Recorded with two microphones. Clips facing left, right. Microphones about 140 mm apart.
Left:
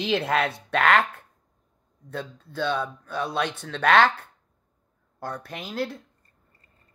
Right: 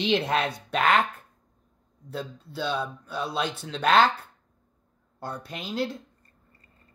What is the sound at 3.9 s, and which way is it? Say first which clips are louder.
Speech: left 1 dB; centre (ahead or behind).